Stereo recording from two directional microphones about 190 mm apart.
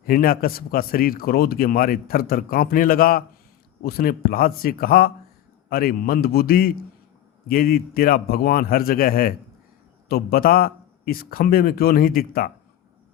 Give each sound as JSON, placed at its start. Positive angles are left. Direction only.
{"t": 0.0, "sound": "a man's voice", "side_deg": 50}